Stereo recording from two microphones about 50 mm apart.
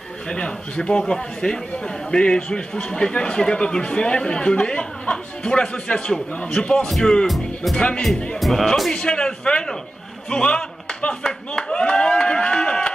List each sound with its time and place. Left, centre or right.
0.3 s a man's voice: centre
7.7 s a man's voice: left
8.4 s speech: centre
8.9 s a man's voice: centre
11.5 s clapping: centre